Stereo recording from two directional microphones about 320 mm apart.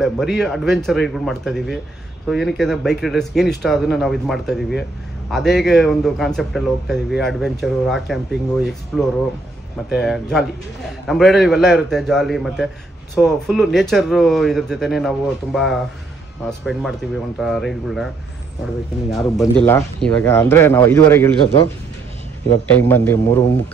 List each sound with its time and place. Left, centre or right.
0.0 s a man's voice: centre
22.8 s speech: centre